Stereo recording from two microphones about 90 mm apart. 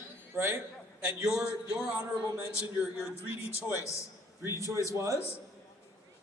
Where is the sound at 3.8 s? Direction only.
35° left (ahead or behind).